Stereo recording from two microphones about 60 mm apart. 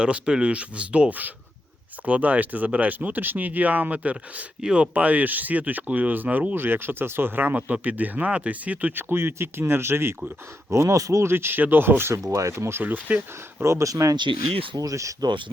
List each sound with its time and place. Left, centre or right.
0.0 s speech: centre
6.5 s speech: right
9.0 s speech: right
10.7 s speech: right
11.3 s speech: right
12.3 s speech: right
12.8 s speech: right
13.6 s speech: right
13.9 s speech: right